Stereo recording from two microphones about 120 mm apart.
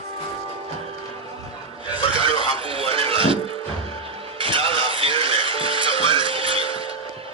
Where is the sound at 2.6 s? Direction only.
50° right (ahead or behind).